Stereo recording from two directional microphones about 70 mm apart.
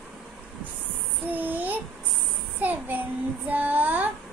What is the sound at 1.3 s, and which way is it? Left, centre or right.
Child singing, right.